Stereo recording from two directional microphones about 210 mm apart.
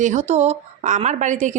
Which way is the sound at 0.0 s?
35° right (ahead or behind).